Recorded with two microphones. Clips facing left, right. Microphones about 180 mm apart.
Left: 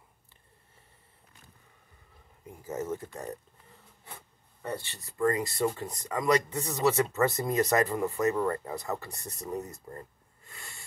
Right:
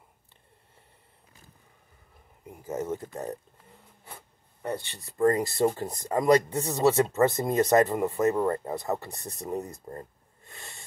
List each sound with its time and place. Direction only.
2.5 s speech: 15° right (ahead or behind)
4.6 s speech: 20° right (ahead or behind)